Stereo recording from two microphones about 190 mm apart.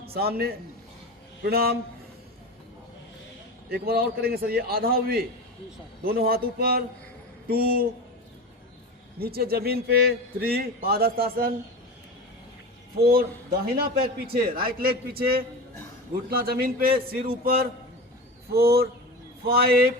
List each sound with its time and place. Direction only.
0.0 s a man's voice: 55° right (ahead or behind)
3.7 s a man's voice: 55° right (ahead or behind)
9.1 s a man's voice: 55° right (ahead or behind)
13.7 s a man's voice: 50° right (ahead or behind)